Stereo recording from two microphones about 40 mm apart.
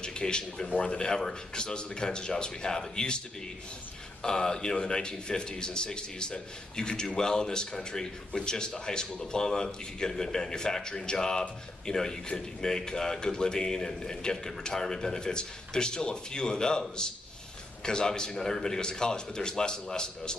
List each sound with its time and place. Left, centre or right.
0.0 s a man's voice: left
4.2 s a man's voice: centre
17.8 s a man's voice: centre